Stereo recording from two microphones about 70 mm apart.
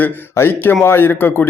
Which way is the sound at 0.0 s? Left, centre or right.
Left.